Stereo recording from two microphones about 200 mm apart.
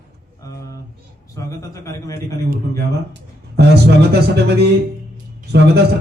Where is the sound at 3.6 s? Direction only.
55° right (ahead or behind).